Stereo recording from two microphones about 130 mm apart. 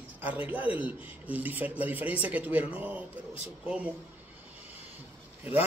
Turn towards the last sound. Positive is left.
turn(degrees=-15)  # may be behind; listen again after turning